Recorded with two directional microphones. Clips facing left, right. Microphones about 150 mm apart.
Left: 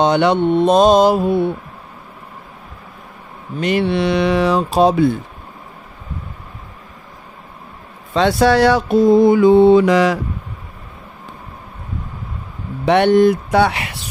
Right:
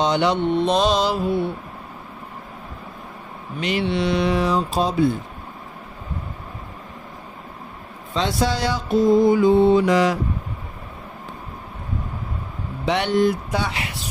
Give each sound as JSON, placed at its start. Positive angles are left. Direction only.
{"t": 0.0, "sound": "mantra", "side_deg": 60}
{"t": 3.6, "sound": "mantra", "side_deg": 55}
{"t": 8.1, "sound": "mantra", "side_deg": 65}
{"t": 12.8, "sound": "speech", "side_deg": 60}